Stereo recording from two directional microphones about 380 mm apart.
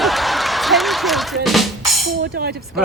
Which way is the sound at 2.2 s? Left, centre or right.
Right.